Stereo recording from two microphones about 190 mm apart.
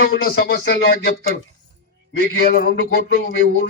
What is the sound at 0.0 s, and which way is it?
Speech, 50° left (ahead or behind).